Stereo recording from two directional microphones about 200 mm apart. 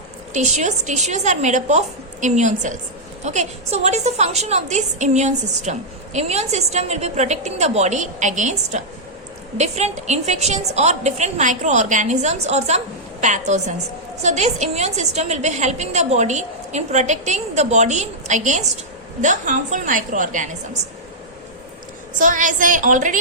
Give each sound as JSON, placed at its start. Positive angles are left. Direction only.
{"t": 0.3, "sound": "a woman's voice", "side_deg": -35}
{"t": 22.2, "sound": "a woman's voice", "side_deg": -40}